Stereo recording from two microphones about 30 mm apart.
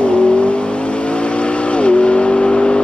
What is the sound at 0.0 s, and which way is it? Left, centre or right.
Vehicle, left.